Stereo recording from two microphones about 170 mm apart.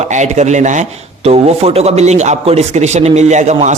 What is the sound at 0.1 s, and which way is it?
Speech, 45° right (ahead or behind).